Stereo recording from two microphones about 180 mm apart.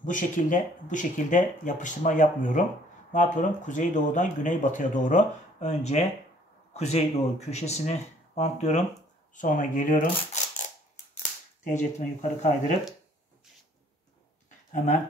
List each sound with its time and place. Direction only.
0.0 s speech: 45° left (ahead or behind)
11.7 s speech: 40° left (ahead or behind)